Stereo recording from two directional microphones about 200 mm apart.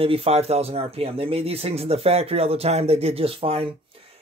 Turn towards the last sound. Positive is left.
turn(degrees=-25)  # may be behind; listen again after turning